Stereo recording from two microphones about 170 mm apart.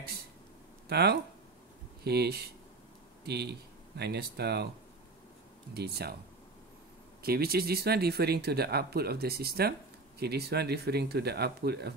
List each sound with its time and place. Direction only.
0.8 s speech: 75° right (ahead or behind)
5.8 s speech: 70° right (ahead or behind)
7.2 s speech: 65° right (ahead or behind)